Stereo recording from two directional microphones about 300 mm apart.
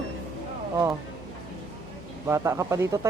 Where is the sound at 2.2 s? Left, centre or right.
Centre.